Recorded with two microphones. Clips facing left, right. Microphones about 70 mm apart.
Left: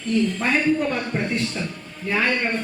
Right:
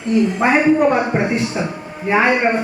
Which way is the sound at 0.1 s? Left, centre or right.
Centre.